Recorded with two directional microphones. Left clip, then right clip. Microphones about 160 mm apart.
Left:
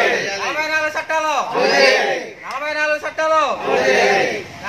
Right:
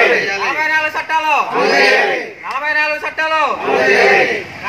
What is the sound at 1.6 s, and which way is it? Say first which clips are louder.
Speech: even; 20° right (ahead or behind).